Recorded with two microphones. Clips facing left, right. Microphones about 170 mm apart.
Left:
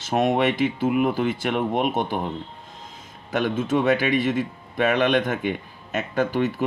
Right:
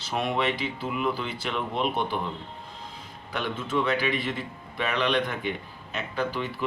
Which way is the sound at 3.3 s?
45° left (ahead or behind).